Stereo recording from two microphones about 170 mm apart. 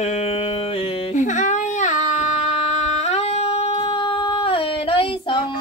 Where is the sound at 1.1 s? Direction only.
45° left (ahead or behind).